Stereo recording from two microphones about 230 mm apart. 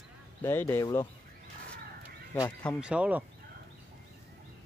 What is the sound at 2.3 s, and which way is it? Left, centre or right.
Speech, centre.